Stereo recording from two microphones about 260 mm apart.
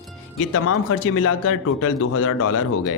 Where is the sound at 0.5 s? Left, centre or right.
Left.